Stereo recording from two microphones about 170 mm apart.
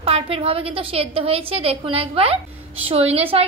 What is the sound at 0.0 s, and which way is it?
A woman's voice, 35° right (ahead or behind).